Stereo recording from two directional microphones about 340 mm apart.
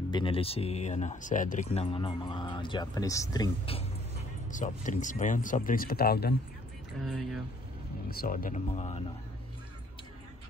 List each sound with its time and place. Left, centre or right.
0.1 s speech: centre
7.0 s speech: centre
8.1 s speech: left